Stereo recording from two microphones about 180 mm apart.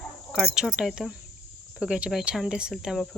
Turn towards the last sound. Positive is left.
turn(degrees=0)  # may be behind; listen again after turning